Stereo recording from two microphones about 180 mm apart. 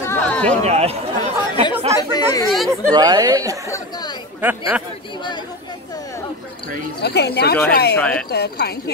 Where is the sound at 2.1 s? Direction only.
20° left (ahead or behind).